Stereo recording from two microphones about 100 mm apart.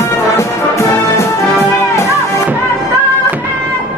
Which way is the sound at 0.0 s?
30° left (ahead or behind).